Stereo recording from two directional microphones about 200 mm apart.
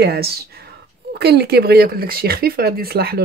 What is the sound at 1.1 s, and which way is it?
Speech, 55° right (ahead or behind).